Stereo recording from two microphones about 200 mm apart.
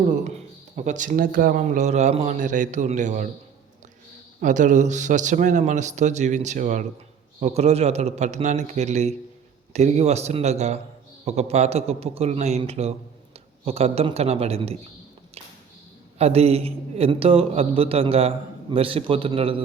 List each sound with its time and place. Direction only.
0.9 s a man's voice: 40° right (ahead or behind)
4.4 s a man's voice: 40° right (ahead or behind)
16.1 s a man's voice: 30° right (ahead or behind)